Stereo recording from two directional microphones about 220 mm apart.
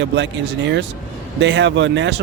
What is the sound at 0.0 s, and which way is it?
Speech, 55° right (ahead or behind).